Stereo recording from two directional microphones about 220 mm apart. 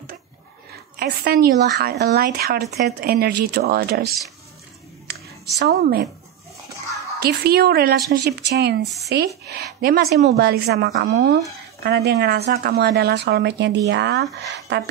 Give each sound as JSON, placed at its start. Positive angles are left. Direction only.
{"t": 0.9, "sound": "a woman's voice", "side_deg": -45}
{"t": 5.6, "sound": "a woman's voice", "side_deg": -45}
{"t": 7.2, "sound": "a woman's voice", "side_deg": -45}
{"t": 8.8, "sound": "speech", "side_deg": 0}
{"t": 9.5, "sound": "a woman's voice", "side_deg": -45}